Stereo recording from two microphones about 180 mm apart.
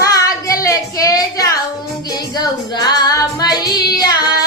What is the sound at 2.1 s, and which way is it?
Female singing, 20° left (ahead or behind).